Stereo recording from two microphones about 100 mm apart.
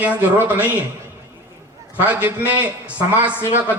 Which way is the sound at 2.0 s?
15° right (ahead or behind).